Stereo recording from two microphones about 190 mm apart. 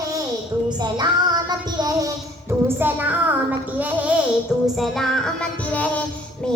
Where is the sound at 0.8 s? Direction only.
20° right (ahead or behind).